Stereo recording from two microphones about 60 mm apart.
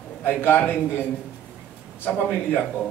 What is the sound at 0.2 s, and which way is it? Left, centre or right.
Speech, left.